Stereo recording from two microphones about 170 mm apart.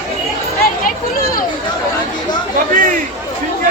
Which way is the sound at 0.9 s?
55° left (ahead or behind).